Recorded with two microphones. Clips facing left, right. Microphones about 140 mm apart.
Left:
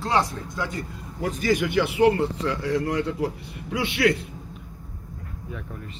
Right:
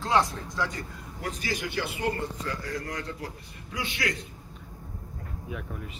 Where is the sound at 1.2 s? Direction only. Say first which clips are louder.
Left 10 dB; 50° left (ahead or behind); by 4.1 s 65° left (ahead or behind).